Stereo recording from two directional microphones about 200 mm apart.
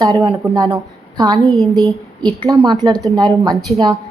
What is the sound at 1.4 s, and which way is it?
Speech, centre (ahead or behind).